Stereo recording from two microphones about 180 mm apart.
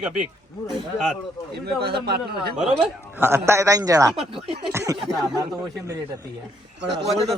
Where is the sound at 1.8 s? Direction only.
65° right (ahead or behind).